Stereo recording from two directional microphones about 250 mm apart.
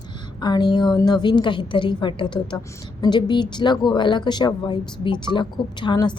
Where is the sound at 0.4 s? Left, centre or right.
Centre.